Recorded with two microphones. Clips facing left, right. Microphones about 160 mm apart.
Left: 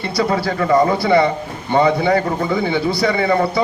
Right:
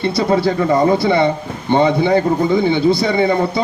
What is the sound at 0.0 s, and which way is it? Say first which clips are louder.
Speech: right 4 dB; 25° right (ahead or behind).